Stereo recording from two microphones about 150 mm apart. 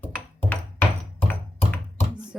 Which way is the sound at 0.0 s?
10° left (ahead or behind).